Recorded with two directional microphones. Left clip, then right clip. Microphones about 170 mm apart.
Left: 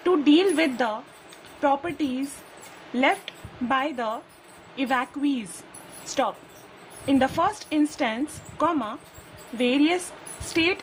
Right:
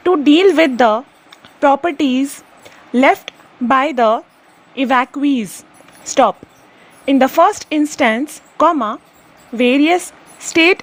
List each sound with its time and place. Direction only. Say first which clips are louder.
0.0 s a woman's voice: right 9 dB; 35° right (ahead or behind)